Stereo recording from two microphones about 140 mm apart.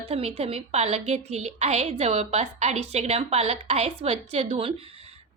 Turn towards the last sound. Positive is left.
turn(degrees=-45)  # may be behind; listen again after turning